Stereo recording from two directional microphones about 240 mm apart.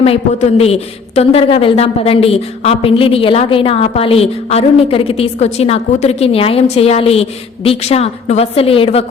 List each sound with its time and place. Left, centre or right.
0.0 s a woman's voice: left